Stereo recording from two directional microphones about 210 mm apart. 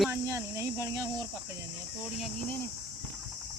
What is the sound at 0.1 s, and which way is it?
Cricket, 10° right (ahead or behind).